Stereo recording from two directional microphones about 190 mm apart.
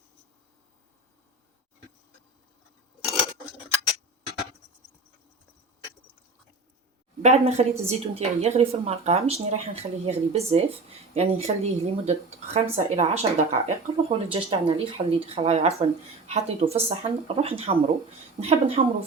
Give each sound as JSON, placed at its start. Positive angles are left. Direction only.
{"t": 7.2, "sound": "a woman's voice", "side_deg": -35}